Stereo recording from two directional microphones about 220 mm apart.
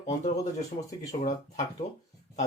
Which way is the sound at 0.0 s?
30° left (ahead or behind).